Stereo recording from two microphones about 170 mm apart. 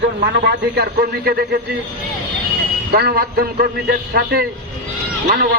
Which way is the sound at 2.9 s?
65° right (ahead or behind).